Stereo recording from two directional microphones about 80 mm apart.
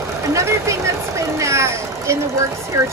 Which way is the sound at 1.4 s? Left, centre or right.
Right.